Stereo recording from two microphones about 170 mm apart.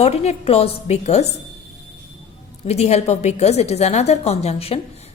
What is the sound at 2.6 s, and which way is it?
A woman's voice, 40° left (ahead or behind).